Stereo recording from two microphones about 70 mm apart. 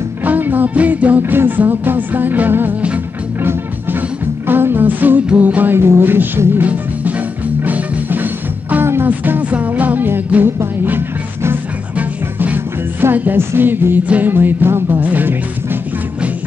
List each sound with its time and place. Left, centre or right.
0.2 s music: right
4.5 s music: right
12.0 s music: right